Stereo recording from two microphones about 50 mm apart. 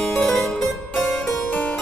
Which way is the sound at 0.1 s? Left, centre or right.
Centre.